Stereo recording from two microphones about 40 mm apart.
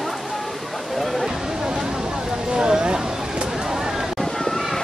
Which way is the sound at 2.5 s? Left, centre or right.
Right.